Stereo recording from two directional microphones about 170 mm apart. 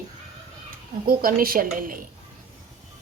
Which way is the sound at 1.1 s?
55° right (ahead or behind).